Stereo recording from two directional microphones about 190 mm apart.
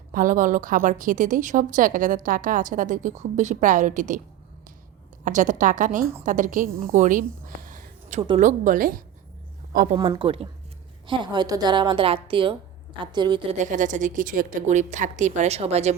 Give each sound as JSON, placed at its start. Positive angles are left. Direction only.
{"t": 0.1, "sound": "a woman's voice", "side_deg": -45}
{"t": 5.2, "sound": "a woman's voice", "side_deg": -40}
{"t": 10.1, "sound": "a woman's voice", "side_deg": -25}
{"t": 13.6, "sound": "a woman's voice", "side_deg": -40}